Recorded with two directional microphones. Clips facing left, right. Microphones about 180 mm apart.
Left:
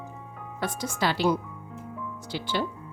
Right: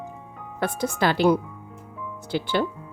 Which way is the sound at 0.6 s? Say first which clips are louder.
Right 5 dB; 55° right (ahead or behind).